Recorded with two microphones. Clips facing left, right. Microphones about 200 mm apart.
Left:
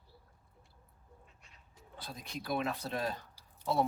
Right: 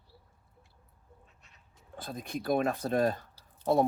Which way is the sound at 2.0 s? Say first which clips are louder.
Right 7 dB; 50° right (ahead or behind).